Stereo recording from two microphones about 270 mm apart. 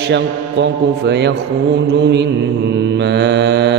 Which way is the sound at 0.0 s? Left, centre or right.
Right.